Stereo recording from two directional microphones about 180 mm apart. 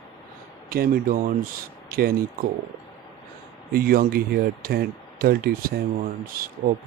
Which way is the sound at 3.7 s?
55° right (ahead or behind).